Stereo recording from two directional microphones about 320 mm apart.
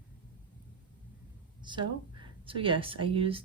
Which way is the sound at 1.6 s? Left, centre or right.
Centre.